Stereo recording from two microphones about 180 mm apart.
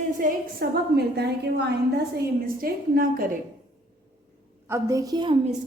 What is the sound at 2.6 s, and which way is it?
Speech, 55° right (ahead or behind).